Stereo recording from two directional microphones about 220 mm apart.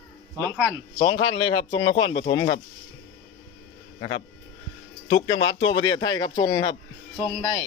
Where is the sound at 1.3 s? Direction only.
20° left (ahead or behind).